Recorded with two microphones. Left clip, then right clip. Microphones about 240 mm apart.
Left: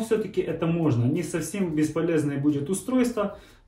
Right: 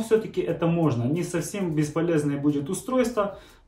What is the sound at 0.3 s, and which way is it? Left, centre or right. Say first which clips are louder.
Speech: right 1 dB; centre.